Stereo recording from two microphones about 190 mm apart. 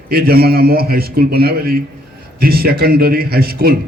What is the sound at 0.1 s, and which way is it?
A man's voice, 50° right (ahead or behind).